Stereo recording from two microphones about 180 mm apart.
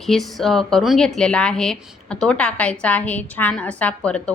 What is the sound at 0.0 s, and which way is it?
A woman's voice, centre (ahead or behind).